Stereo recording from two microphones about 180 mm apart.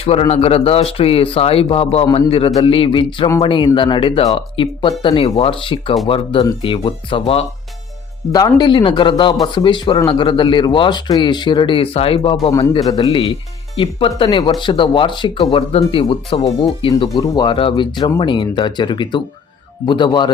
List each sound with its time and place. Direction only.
0.0 s speech: 35° left (ahead or behind)
12.5 s speech: 20° left (ahead or behind)
13.1 s speech: 30° left (ahead or behind)